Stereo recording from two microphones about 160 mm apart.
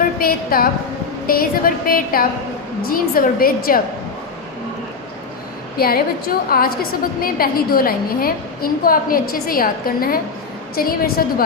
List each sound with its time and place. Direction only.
0.2 s a woman's voice: 65° left (ahead or behind)
5.7 s a woman's voice: 70° left (ahead or behind)